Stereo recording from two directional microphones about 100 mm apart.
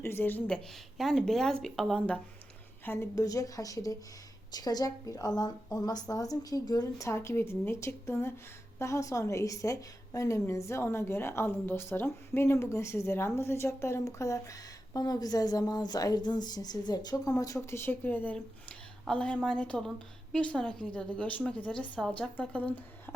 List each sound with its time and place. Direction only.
0.0 s a woman's voice: 20° left (ahead or behind)
0.9 s a woman's voice: centre (ahead or behind)
2.8 s a woman's voice: 25° left (ahead or behind)
7.1 s a woman's voice: 25° left (ahead or behind)